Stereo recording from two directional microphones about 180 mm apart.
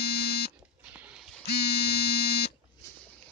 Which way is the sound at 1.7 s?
30° left (ahead or behind).